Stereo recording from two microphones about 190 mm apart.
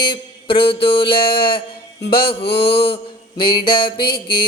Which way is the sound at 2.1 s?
55° left (ahead or behind).